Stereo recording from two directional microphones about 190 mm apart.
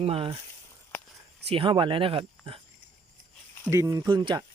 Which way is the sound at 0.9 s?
10° left (ahead or behind).